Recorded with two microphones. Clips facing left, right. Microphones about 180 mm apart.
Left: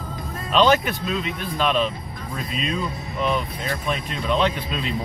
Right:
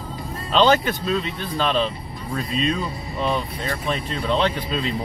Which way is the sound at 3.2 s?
35° right (ahead or behind).